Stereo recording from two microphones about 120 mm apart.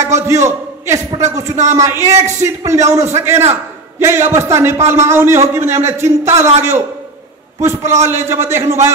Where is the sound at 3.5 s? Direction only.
20° right (ahead or behind).